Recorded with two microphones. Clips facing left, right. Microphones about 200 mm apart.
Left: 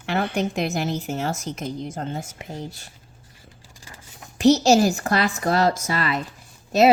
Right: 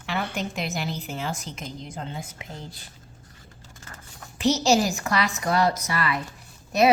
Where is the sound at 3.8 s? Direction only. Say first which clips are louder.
Even; 10° left (ahead or behind).